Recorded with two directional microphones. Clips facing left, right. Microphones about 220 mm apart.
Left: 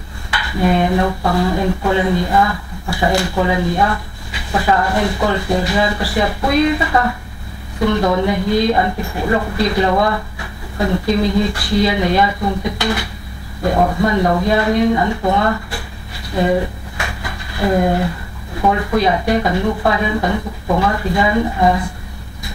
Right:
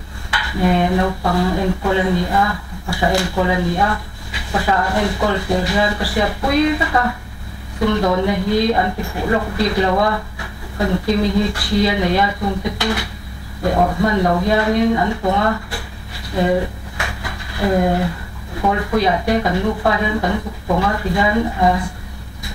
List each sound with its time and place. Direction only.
0.3 s dishes: 20° left (ahead or behind)
0.7 s speech: 25° left (ahead or behind)
11.5 s speech: 20° left (ahead or behind)
13.7 s speech: 30° left (ahead or behind)
16.9 s a sound: 20° left (ahead or behind)
18.6 s speech: 20° left (ahead or behind)